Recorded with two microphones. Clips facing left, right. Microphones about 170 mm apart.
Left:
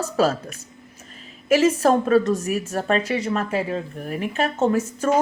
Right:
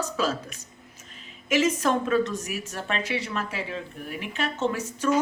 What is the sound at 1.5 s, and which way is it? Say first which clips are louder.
A woman's voice: left 6 dB; 35° left (ahead or behind).